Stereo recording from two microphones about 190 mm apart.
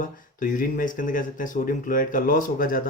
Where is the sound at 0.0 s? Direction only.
45° left (ahead or behind).